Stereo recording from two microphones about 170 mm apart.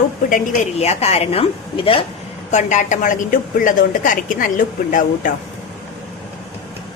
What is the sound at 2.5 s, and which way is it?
A woman's voice, 45° left (ahead or behind).